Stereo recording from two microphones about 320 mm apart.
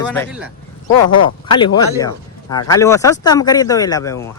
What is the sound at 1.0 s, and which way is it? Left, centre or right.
Speech, left.